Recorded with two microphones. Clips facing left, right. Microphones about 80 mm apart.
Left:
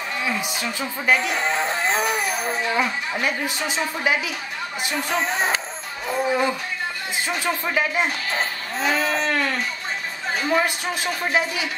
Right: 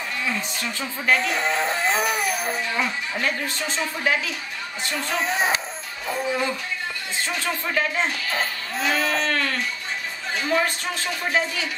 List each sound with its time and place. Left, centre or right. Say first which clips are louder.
0.2 s speech: left 2 dB; centre
2.6 s a woman's voice: left 3 dB; centre
5.2 s speech: even; centre
6.2 s a woman's voice: left 4 dB; centre
8.8 s baby cry: left 1 dB; centre
9.3 s a sound: left 2 dB; centre
10.3 s a woman's voice: left 1 dB; centre